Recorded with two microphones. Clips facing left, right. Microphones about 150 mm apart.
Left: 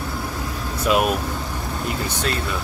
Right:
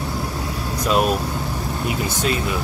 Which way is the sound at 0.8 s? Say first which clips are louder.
Even; 5° left (ahead or behind).